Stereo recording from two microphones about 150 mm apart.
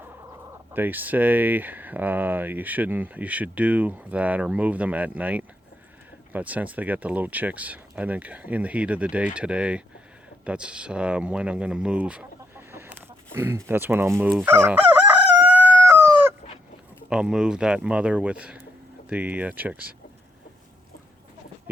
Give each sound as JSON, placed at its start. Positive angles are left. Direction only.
{"t": 0.7, "sound": "speech", "side_deg": -10}
{"t": 15.4, "sound": "chicken", "side_deg": -10}
{"t": 17.1, "sound": "speech", "side_deg": -5}